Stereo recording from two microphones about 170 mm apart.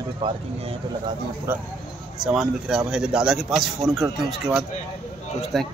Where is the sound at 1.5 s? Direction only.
10° right (ahead or behind).